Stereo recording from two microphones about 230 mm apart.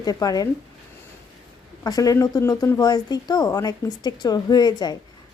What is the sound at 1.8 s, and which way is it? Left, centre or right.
Speech, centre.